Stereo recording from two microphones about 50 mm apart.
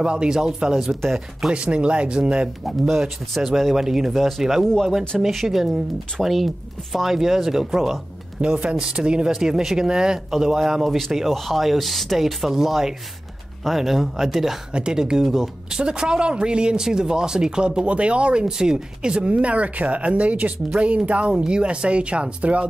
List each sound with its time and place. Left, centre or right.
0.0 s speech: centre
1.0 s speech: centre
1.5 s speech: right
2.6 s speech: centre
8.4 s speech: centre
14.7 s speech: centre